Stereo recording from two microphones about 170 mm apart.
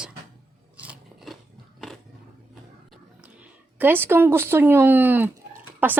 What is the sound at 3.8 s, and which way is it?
A woman's voice, 10° right (ahead or behind).